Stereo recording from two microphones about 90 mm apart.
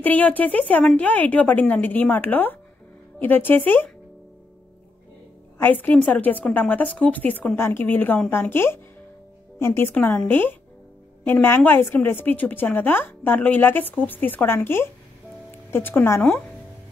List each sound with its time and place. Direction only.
0.0 s speech: 20° left (ahead or behind)
5.6 s speech: 20° left (ahead or behind)